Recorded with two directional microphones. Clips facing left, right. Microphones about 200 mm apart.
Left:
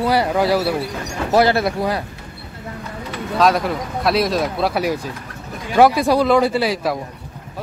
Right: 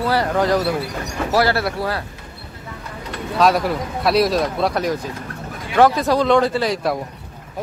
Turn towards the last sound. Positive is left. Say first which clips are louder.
# left 1 dB
turn(degrees=0)  # may be behind; listen again after turning